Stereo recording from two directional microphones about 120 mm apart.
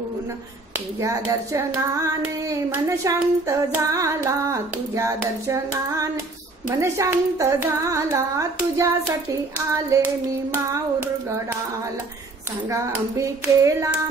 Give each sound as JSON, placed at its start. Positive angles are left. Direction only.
{"t": 1.0, "sound": "hands", "side_deg": -25}
{"t": 13.2, "sound": "hands", "side_deg": -25}